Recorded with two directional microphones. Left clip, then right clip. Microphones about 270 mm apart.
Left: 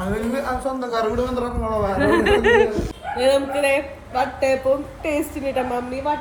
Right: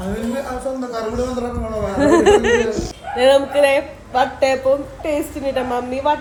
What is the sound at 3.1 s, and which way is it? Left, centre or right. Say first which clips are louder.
A man's voice: right 5 dB; centre.